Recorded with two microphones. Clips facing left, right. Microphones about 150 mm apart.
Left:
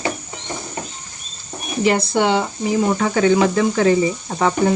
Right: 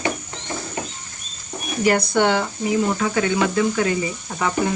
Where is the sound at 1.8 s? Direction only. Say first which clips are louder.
Left 1 dB; 25° left (ahead or behind).